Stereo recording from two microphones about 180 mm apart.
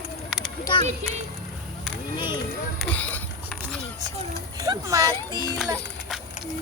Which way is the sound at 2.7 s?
5° left (ahead or behind).